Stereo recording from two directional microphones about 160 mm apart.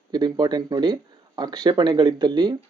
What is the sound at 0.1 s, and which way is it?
Speech, 25° right (ahead or behind).